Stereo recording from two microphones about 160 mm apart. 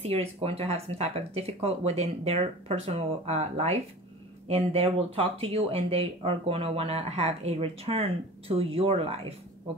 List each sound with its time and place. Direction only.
0.0 s speech: 40° right (ahead or behind)